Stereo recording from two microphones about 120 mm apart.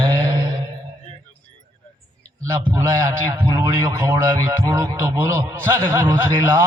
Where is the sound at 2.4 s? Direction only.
25° right (ahead or behind).